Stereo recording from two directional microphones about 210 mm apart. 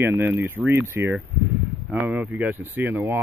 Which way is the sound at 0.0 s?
10° right (ahead or behind).